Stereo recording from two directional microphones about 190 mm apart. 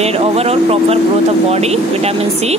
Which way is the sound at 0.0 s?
30° right (ahead or behind).